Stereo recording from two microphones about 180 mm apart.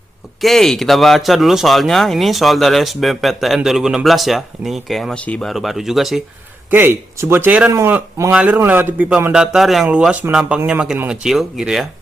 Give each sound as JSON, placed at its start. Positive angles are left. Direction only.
{"t": 0.4, "sound": "speech", "side_deg": 0}